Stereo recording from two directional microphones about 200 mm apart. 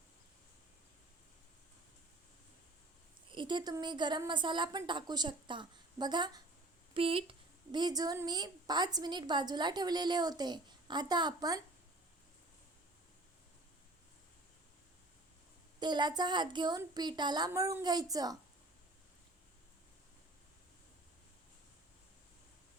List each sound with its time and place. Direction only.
3.3 s a woman's voice: 25° right (ahead or behind)
15.8 s a woman's voice: 20° right (ahead or behind)